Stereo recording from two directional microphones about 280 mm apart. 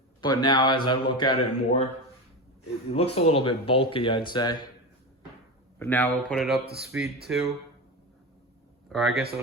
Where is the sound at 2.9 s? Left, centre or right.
Left.